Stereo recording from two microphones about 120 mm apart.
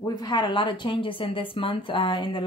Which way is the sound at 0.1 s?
40° left (ahead or behind).